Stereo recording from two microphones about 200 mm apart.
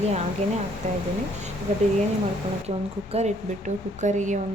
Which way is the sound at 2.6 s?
30° right (ahead or behind).